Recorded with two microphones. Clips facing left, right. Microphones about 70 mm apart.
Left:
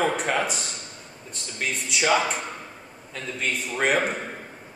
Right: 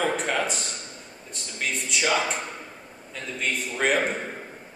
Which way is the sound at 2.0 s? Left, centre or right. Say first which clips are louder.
Left 3 dB; centre.